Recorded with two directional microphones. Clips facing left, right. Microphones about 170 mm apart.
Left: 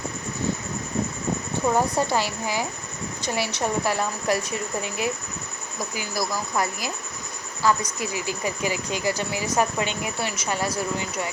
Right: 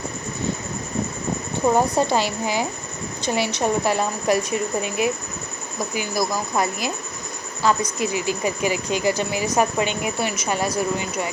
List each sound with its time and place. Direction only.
1.6 s a woman's voice: 20° right (ahead or behind)